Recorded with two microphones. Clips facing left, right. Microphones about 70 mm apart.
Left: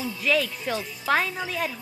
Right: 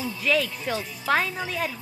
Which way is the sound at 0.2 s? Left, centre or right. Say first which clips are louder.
Even; centre.